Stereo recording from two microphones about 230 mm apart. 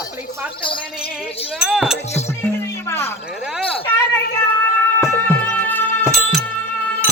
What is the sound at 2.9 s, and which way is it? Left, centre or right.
Music, centre.